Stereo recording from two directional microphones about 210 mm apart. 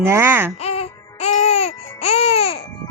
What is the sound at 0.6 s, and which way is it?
Music, 30° left (ahead or behind).